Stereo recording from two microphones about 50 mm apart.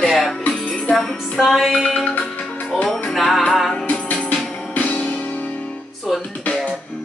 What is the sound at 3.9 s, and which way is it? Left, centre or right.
Music, left.